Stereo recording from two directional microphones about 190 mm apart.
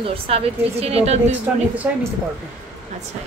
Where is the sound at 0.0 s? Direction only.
30° right (ahead or behind).